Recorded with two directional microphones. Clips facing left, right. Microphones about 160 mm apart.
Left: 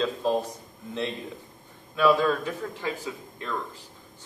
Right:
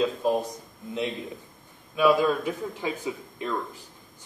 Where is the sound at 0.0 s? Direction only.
15° right (ahead or behind).